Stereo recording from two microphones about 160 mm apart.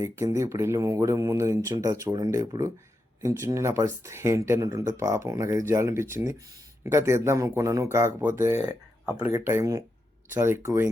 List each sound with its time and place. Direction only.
0.0 s speech: 20° right (ahead or behind)